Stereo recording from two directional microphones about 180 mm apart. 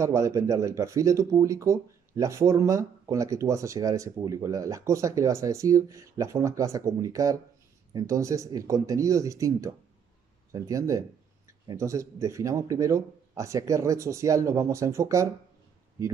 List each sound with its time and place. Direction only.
0.0 s speech: 15° right (ahead or behind)